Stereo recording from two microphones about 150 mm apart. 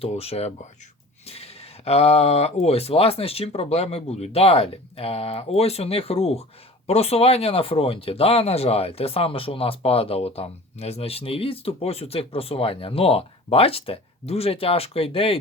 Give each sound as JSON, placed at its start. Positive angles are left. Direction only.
{"t": 0.0, "sound": "speech", "side_deg": 40}